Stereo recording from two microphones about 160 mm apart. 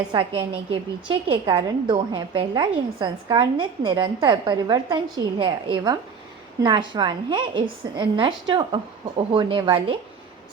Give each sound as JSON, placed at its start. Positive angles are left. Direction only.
{"t": 0.3, "sound": "a woman's voice", "side_deg": -35}